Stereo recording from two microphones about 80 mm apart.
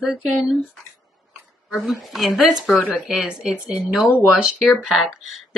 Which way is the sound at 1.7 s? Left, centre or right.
Centre.